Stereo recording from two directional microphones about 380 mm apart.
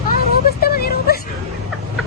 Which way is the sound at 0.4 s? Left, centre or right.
Left.